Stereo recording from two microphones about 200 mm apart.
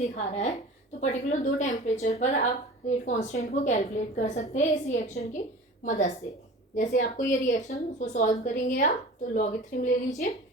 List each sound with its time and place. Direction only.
0.0 s a woman's voice: 30° left (ahead or behind)